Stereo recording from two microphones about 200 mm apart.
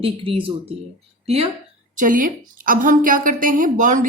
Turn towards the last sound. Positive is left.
turn(degrees=-40)  # may be behind; listen again after turning